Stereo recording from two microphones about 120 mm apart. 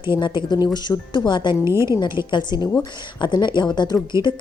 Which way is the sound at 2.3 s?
40° left (ahead or behind).